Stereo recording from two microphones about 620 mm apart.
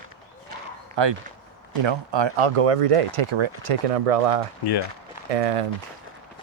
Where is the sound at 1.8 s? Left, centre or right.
Right.